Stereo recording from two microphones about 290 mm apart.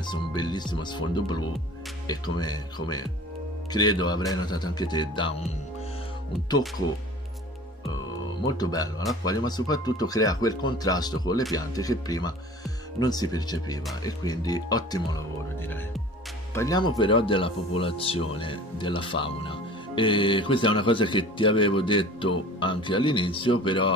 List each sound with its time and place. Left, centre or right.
0.0 s speech: centre
8.5 s speech: centre